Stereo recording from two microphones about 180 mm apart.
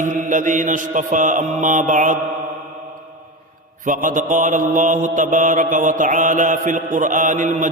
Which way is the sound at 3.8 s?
45° right (ahead or behind).